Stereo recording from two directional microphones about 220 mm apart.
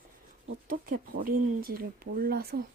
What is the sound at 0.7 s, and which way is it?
Speech, 40° right (ahead or behind).